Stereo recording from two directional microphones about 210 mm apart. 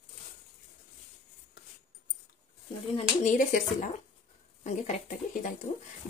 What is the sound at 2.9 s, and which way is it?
Speech, 35° left (ahead or behind).